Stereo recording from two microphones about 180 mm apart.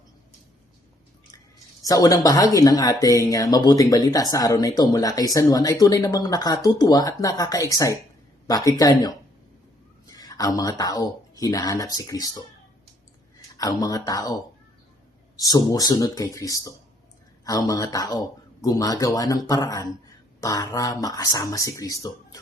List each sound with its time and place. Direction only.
1.8 s speech: 20° left (ahead or behind)
13.6 s speech: 20° left (ahead or behind)
15.4 s speech: 20° left (ahead or behind)